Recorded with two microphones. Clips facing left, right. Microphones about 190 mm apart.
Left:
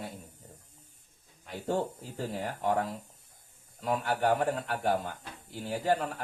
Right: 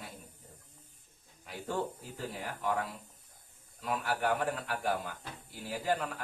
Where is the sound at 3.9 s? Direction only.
35° left (ahead or behind).